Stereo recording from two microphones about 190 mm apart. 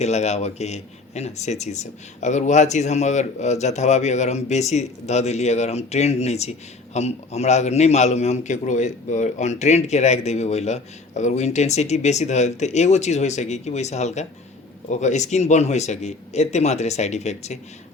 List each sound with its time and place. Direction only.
0.0 s a man's voice: 35° left (ahead or behind)